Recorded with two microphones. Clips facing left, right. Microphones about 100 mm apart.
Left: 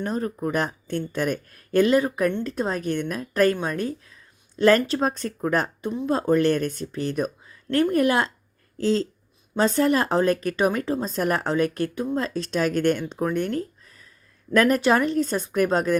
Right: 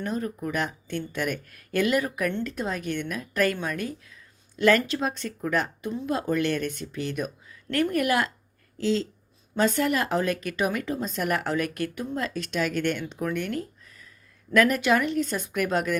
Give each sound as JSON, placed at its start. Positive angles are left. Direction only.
{"t": 0.0, "sound": "speech", "side_deg": 35}
{"t": 8.8, "sound": "speech", "side_deg": 40}